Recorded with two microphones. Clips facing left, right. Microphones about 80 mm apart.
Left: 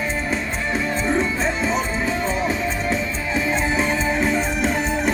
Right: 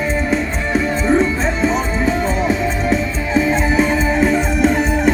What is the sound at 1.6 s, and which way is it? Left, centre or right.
Music, right.